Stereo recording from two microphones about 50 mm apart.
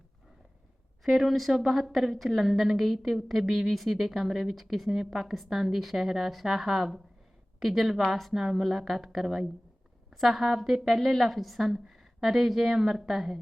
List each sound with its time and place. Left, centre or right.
1.0 s a woman's voice: centre